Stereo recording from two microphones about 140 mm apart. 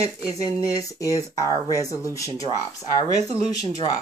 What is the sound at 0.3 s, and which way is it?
Speech, 25° left (ahead or behind).